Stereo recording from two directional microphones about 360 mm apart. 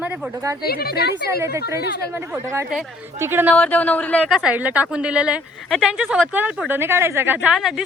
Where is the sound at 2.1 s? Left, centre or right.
Centre.